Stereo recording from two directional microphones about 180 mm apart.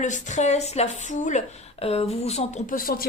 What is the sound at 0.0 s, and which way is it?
A woman's voice, 40° left (ahead or behind).